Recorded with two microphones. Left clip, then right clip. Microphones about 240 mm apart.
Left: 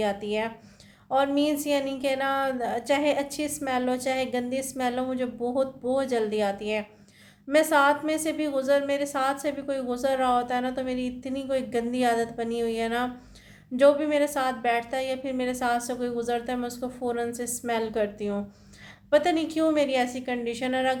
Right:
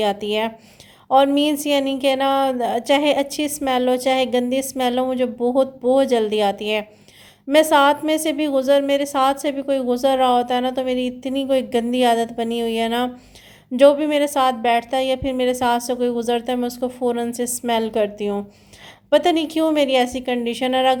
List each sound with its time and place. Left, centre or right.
0.0 s a woman's voice: right